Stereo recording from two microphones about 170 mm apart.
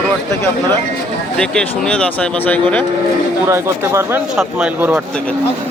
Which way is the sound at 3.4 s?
15° right (ahead or behind).